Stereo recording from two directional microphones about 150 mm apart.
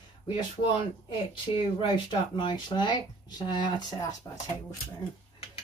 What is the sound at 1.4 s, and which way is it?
Speech, 35° left (ahead or behind).